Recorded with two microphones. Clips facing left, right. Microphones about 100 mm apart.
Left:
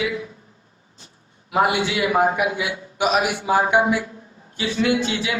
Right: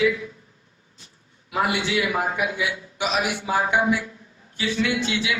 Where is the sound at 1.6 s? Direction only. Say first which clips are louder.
Left 2 dB; 50° left (ahead or behind).